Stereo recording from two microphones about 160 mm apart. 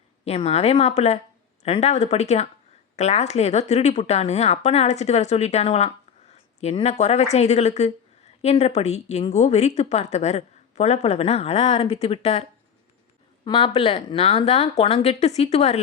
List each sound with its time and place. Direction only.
0.3 s speech: 40° left (ahead or behind)